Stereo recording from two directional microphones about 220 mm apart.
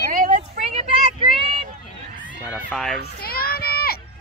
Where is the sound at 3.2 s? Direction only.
45° left (ahead or behind).